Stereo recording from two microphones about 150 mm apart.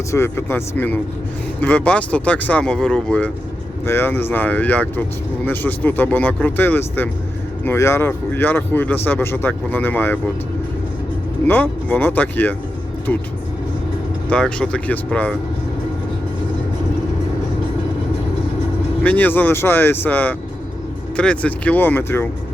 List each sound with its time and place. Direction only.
0.1 s speech: 15° left (ahead or behind)
11.4 s speech: 10° left (ahead or behind)
14.3 s speech: 5° left (ahead or behind)
19.0 s speech: 10° left (ahead or behind)